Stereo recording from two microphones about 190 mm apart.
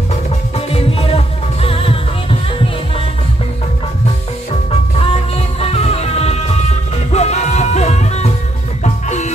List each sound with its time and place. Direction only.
0.1 s music: 30° left (ahead or behind)
4.9 s music: 30° left (ahead or behind)